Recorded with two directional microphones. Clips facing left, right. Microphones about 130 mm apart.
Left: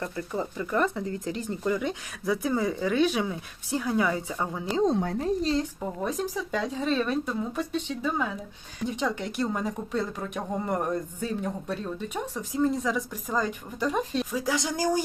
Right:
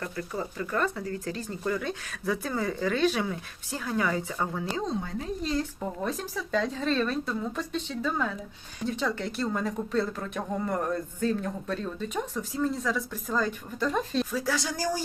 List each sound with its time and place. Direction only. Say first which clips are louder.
0.0 s speech: left 2 dB; 20° left (ahead or behind)
4.9 s speech: left 6 dB; 65° left (ahead or behind)
5.2 s speech: left 6 dB; 35° left (ahead or behind)
5.8 s speech: left 2 dB; 10° left (ahead or behind)